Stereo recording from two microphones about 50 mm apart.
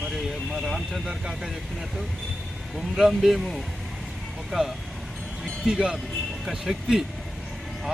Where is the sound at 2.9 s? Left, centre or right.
Centre.